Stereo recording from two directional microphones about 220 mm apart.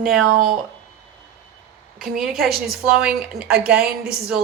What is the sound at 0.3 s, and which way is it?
Speech, 40° right (ahead or behind).